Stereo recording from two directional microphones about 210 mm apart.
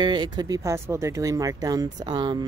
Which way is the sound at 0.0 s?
20° right (ahead or behind).